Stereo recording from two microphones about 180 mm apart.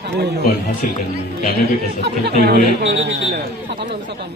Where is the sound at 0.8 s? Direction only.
45° left (ahead or behind).